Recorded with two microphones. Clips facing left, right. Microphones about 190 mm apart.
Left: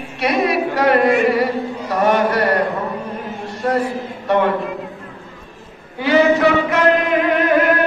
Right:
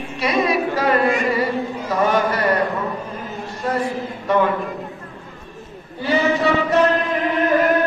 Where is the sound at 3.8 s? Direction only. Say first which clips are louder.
Left 1 dB; 65° left (ahead or behind).